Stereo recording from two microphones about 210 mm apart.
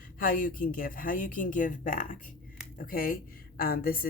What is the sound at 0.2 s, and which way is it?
Speech, 40° left (ahead or behind).